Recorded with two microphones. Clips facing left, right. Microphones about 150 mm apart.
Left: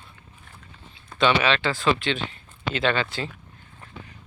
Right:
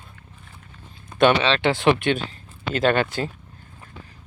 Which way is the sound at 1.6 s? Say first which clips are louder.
Right 5 dB; 65° right (ahead or behind).